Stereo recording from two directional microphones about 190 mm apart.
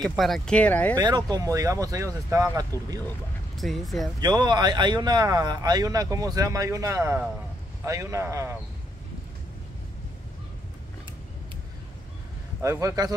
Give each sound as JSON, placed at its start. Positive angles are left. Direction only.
{"t": 0.2, "sound": "speech", "side_deg": 5}
{"t": 0.9, "sound": "speech", "side_deg": -20}
{"t": 3.5, "sound": "speech", "side_deg": 0}
{"t": 4.2, "sound": "a man's voice", "side_deg": -20}
{"t": 12.6, "sound": "a man's voice", "side_deg": -15}